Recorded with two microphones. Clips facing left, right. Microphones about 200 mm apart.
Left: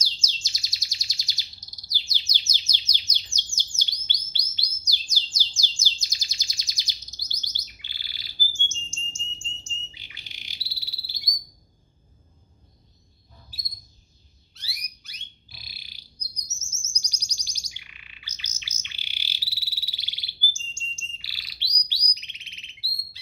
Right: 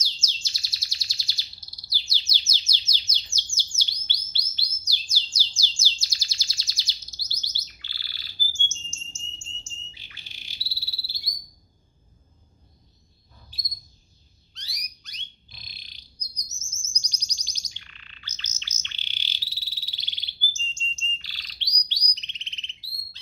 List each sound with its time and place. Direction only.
0.2 s chirp: 15° left (ahead or behind)
1.9 s bird: 15° left (ahead or behind)
5.9 s chirp: 15° left (ahead or behind)
9.9 s bird: 15° left (ahead or behind)
13.5 s a sound: 5° left (ahead or behind)
14.5 s frog: 5° left (ahead or behind)
21.8 s bird: 10° left (ahead or behind)